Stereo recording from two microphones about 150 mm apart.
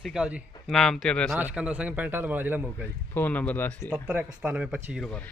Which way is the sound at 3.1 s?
10° left (ahead or behind).